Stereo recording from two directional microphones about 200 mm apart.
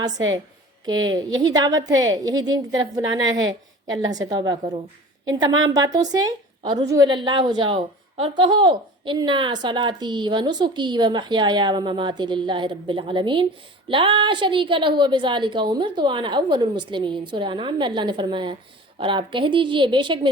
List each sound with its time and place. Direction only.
0.9 s a woman's voice: 80° right
1.4 s a woman's voice: 20° right (ahead or behind)